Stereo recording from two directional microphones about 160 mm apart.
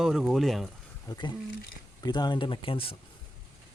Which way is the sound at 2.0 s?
25° left (ahead or behind).